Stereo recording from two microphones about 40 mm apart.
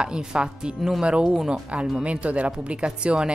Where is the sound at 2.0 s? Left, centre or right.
Right.